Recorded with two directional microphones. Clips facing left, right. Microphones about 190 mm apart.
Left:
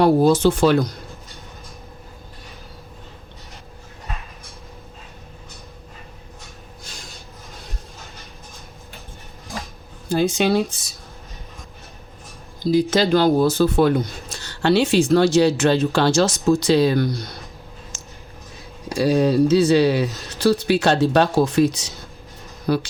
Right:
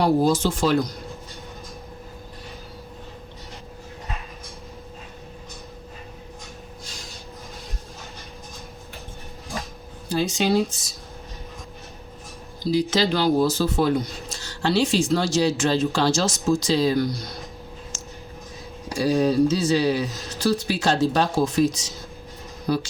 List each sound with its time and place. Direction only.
0.0 s speech: 60° left (ahead or behind)
10.1 s speech: 50° left (ahead or behind)
12.7 s speech: 55° left (ahead or behind)
19.2 s speech: 65° left (ahead or behind)